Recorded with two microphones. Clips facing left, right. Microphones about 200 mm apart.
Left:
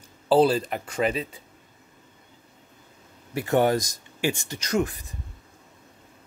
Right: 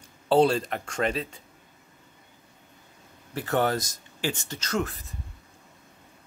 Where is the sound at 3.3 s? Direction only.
15° left (ahead or behind).